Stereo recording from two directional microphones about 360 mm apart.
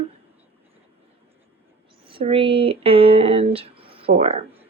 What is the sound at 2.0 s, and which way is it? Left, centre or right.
Speech, centre.